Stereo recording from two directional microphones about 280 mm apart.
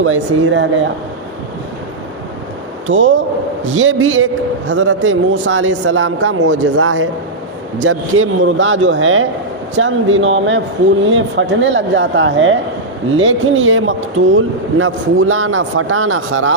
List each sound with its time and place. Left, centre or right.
0.0 s a man's voice: right
2.8 s a man's voice: right